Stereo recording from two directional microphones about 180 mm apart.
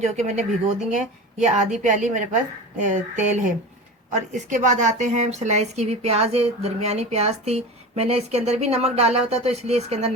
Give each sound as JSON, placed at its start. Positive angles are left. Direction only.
{"t": 0.0, "sound": "a woman's voice", "side_deg": -40}